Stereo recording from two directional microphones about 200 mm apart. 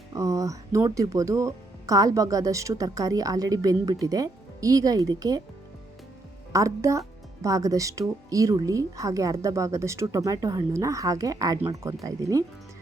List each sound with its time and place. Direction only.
0.1 s speech: 15° right (ahead or behind)
6.5 s speech: 15° right (ahead or behind)